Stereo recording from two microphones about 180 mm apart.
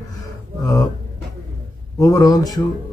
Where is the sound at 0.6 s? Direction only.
20° left (ahead or behind).